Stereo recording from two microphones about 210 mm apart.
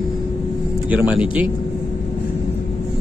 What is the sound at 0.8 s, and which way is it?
Speech, 5° right (ahead or behind).